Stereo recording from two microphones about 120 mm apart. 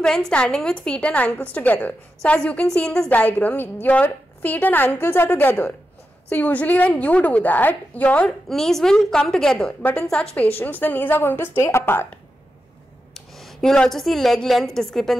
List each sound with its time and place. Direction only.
0.0 s a woman's voice: 5° left (ahead or behind)
13.1 s a woman's voice: centre (ahead or behind)